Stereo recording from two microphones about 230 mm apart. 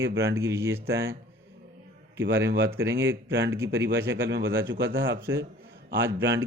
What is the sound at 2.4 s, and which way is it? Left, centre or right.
Speech, right.